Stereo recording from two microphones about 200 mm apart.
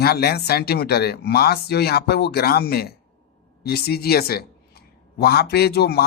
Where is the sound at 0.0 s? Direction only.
50° left (ahead or behind).